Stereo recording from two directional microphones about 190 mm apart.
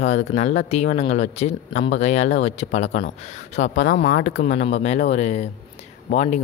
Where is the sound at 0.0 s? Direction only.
35° left (ahead or behind).